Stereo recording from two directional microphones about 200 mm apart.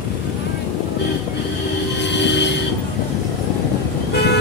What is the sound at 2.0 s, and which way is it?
Vehicle, 60° left (ahead or behind).